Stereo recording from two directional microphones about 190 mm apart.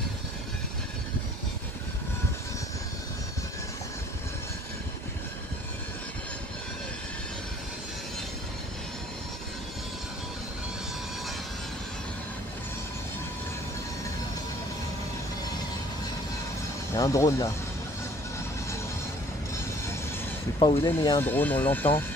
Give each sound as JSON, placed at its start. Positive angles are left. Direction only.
{"t": 16.9, "sound": "speech", "side_deg": 15}
{"t": 20.5, "sound": "speech", "side_deg": 25}